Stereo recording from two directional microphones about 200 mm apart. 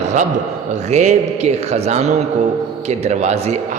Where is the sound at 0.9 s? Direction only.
35° right (ahead or behind).